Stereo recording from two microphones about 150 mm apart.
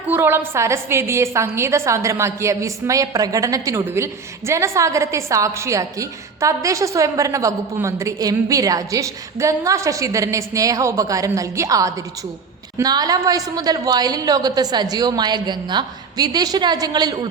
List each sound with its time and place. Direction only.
0.1 s a woman's voice: 15° right (ahead or behind)